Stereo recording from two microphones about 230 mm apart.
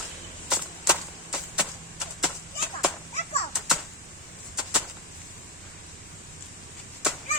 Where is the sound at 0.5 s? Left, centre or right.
Centre.